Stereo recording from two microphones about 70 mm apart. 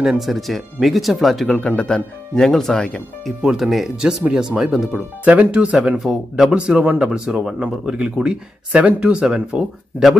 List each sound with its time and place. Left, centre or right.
0.0 s speech: centre
1.6 s speech: centre
3.4 s speech: centre
5.2 s speech: centre
5.9 s speech: centre